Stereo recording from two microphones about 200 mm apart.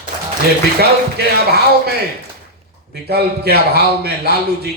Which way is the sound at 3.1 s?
55° right (ahead or behind).